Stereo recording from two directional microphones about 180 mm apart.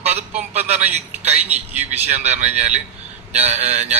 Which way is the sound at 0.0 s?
35° right (ahead or behind).